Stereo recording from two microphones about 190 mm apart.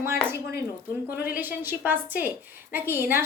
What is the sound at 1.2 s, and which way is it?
A woman's voice, 10° right (ahead or behind).